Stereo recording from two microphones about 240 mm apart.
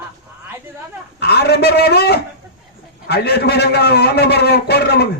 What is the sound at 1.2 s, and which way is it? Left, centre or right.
A man's voice, left.